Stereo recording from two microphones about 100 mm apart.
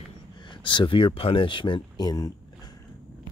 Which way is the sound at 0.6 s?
55° left (ahead or behind).